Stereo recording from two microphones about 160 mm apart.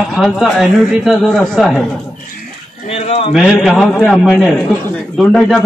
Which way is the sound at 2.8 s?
40° left (ahead or behind).